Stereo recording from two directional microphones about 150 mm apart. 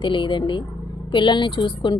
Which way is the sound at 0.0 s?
35° left (ahead or behind).